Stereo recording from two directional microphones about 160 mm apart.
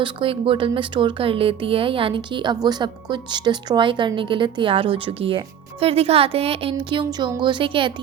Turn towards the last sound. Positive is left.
turn(degrees=-30)  # may be behind; listen again after turning